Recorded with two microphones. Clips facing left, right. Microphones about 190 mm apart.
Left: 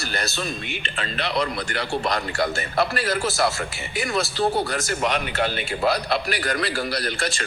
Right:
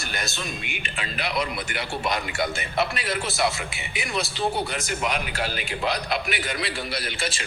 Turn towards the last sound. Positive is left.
turn(degrees=0)  # may be behind; listen again after turning